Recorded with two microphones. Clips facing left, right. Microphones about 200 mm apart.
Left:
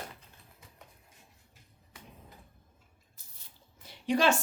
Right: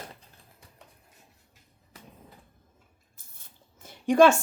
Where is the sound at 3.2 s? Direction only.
50° right (ahead or behind).